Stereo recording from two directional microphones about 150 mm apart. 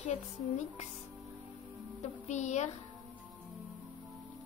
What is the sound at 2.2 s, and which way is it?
Speech, 50° left (ahead or behind).